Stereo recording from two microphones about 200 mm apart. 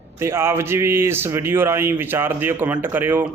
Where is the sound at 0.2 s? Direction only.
10° right (ahead or behind).